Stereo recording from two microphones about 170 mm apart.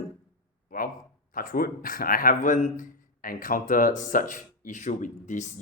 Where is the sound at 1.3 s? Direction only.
55° left (ahead or behind).